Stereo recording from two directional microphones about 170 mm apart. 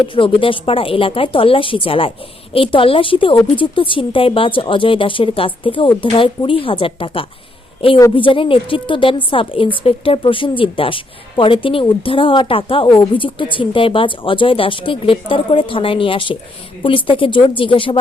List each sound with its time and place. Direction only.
0.0 s a woman's voice: 30° left (ahead or behind)